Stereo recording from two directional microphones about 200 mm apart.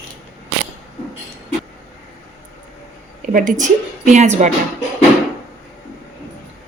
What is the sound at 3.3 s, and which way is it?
Speech, 40° right (ahead or behind).